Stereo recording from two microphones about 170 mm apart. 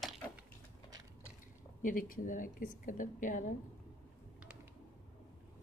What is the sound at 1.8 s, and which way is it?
A woman's voice, 55° left (ahead or behind).